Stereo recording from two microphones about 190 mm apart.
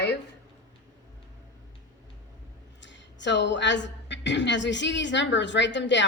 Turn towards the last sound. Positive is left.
turn(degrees=70)  # may be behind; listen again after turning